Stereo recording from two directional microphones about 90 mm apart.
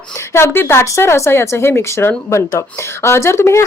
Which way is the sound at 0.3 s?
25° left (ahead or behind).